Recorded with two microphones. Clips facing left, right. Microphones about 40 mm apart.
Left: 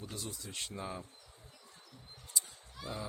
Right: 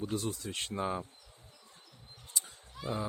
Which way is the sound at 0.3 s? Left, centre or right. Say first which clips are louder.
Right 6 dB; right.